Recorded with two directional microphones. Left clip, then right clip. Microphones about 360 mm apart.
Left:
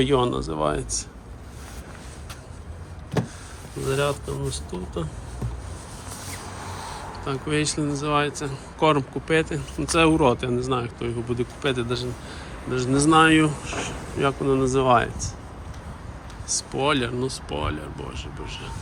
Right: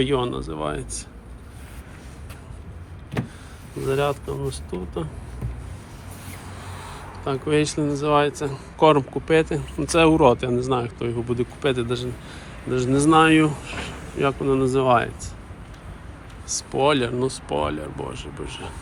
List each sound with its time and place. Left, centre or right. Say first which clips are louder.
0.0 s speech: left 2 dB; centre
3.8 s speech: right 2 dB; centre
7.3 s speech: right 4 dB; centre
13.7 s speech: left 2 dB; left
14.2 s speech: right 1 dB; centre
16.5 s speech: right 3 dB; centre